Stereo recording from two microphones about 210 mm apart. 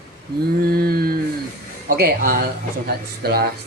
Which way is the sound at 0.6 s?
45° right (ahead or behind).